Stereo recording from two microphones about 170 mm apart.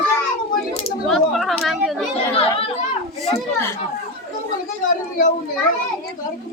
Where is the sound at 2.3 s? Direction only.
35° left (ahead or behind).